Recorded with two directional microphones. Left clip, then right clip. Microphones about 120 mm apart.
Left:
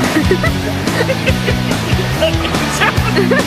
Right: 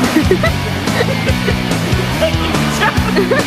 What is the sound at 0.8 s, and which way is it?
Music, centre (ahead or behind).